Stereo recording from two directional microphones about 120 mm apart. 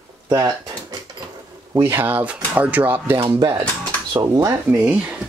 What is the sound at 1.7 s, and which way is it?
Speech, 20° right (ahead or behind).